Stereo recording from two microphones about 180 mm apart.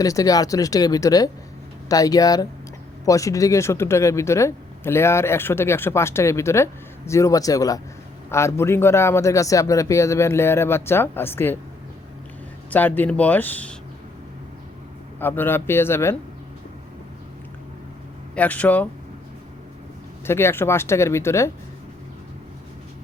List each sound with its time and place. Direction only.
0.0 s speech: 20° left (ahead or behind)
12.7 s speech: 10° left (ahead or behind)
15.2 s speech: 10° left (ahead or behind)
18.3 s speech: 10° left (ahead or behind)
20.2 s speech: 15° left (ahead or behind)